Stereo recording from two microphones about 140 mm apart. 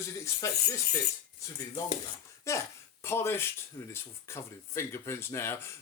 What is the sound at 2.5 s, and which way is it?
Speech, 20° left (ahead or behind).